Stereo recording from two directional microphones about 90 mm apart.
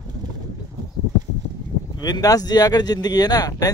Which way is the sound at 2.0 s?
45° left (ahead or behind).